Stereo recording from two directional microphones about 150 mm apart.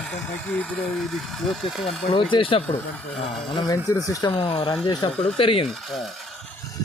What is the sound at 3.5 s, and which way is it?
Speech, 20° left (ahead or behind).